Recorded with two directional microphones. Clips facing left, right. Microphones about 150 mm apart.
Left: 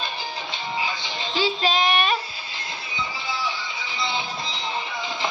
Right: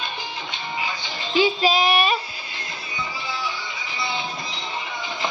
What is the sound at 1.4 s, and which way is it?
Child singing, 5° right (ahead or behind).